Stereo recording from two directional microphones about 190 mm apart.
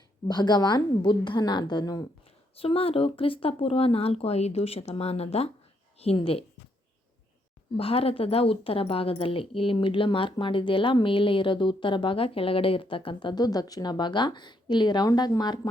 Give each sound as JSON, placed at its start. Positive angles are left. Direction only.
{"t": 0.3, "sound": "speech", "side_deg": 20}
{"t": 2.2, "sound": "speech", "side_deg": 30}
{"t": 7.8, "sound": "speech", "side_deg": 30}